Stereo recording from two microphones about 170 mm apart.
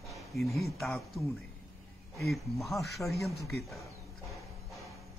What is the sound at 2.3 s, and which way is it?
Speech, centre (ahead or behind).